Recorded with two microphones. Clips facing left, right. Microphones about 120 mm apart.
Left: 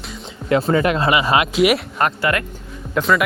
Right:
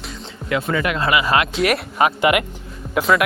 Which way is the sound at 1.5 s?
5° left (ahead or behind).